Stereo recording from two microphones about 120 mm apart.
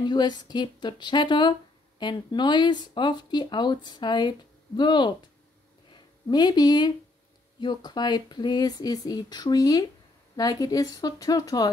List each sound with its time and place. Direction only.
0.0 s speech: 40° left (ahead or behind)